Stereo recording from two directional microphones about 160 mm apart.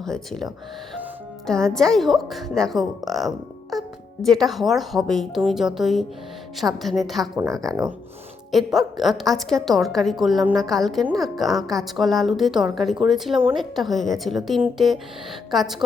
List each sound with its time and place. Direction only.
0.0 s a woman's voice: 5° left (ahead or behind)
7.3 s speech: 20° right (ahead or behind)
8.5 s a woman's voice: centre (ahead or behind)